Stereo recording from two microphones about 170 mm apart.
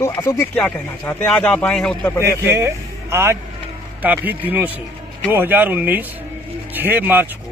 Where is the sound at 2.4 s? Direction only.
15° right (ahead or behind).